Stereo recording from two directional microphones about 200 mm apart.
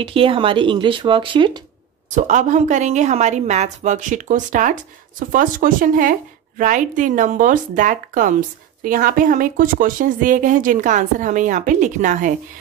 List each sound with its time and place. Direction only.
0.0 s speech: 25° right (ahead or behind)
2.0 s a woman's voice: 35° right (ahead or behind)